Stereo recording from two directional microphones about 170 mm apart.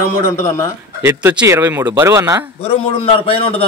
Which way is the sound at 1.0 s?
10° right (ahead or behind).